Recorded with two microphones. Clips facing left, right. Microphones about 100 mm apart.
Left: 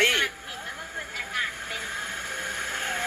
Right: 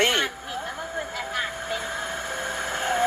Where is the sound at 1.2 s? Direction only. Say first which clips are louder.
Right 4 dB; 30° right (ahead or behind).